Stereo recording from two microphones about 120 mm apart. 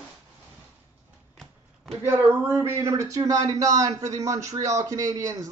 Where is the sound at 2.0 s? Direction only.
20° right (ahead or behind).